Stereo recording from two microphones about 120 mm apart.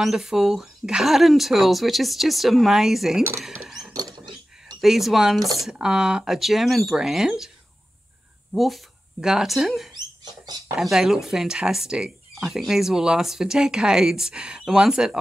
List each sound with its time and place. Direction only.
0.0 s speech: 5° right (ahead or behind)
3.6 s a sound: 5° right (ahead or behind)
4.8 s speech: centre (ahead or behind)
8.5 s speech: centre (ahead or behind)
9.9 s rodents: 35° right (ahead or behind)
10.8 s speech: 5° right (ahead or behind)